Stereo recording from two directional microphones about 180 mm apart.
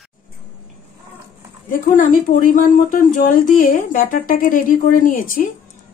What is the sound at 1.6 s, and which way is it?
Speech, 50° left (ahead or behind).